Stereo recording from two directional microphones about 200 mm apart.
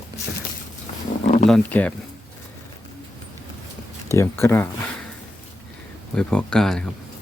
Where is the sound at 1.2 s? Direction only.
35° left (ahead or behind).